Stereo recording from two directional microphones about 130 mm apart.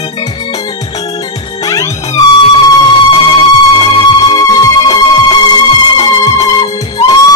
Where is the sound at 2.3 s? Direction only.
40° left (ahead or behind).